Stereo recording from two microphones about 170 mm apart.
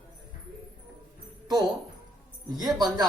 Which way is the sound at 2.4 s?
25° right (ahead or behind).